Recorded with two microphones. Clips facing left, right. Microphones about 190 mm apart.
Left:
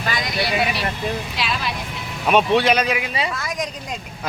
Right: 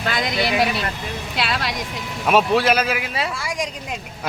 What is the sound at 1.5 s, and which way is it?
Speech, 75° right (ahead or behind).